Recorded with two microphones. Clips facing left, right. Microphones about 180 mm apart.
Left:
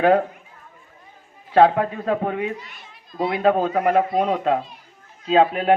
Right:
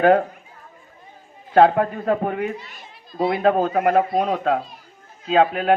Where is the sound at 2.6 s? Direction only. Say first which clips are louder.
Right 1 dB; 35° right (ahead or behind).